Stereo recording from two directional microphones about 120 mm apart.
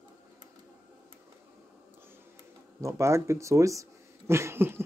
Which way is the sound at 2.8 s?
25° right (ahead or behind).